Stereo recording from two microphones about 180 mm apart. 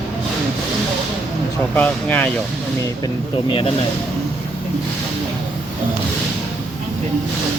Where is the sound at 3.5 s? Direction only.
30° left (ahead or behind).